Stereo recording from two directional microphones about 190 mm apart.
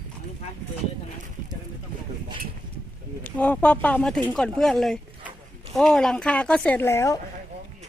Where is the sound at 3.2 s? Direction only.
10° left (ahead or behind).